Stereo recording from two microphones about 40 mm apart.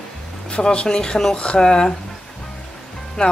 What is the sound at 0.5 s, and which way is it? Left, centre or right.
Speech, left.